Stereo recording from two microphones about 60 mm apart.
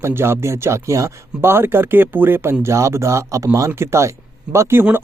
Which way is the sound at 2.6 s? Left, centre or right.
Right.